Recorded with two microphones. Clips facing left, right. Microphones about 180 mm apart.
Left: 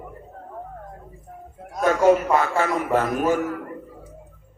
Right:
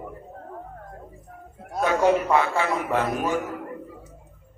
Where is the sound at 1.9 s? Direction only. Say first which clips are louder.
Left 3 dB; 45° left (ahead or behind).